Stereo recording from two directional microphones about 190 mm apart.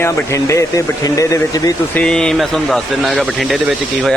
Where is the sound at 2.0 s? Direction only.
5° left (ahead or behind).